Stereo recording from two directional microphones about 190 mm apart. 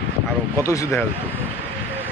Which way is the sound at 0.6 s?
15° left (ahead or behind).